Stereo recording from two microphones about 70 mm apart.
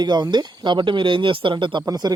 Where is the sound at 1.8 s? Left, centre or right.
Right.